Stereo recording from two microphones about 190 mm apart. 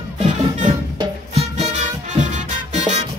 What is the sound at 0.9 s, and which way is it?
Music, 35° right (ahead or behind).